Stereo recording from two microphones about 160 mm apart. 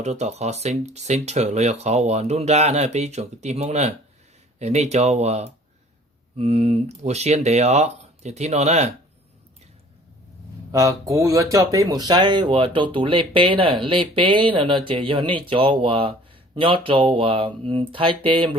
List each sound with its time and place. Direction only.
0.0 s speech: 45° right (ahead or behind)
10.7 s speech: 20° right (ahead or behind)